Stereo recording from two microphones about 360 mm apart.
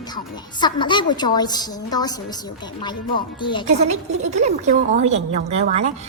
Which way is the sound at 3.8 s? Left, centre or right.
Centre.